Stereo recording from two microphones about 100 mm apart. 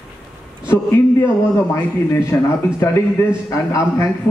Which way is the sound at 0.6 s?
30° left (ahead or behind).